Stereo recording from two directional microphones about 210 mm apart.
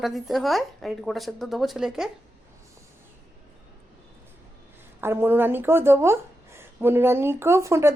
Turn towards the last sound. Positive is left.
turn(degrees=-15)  # may be behind; listen again after turning